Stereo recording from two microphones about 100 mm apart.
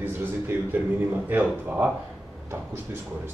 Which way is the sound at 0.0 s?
20° right (ahead or behind).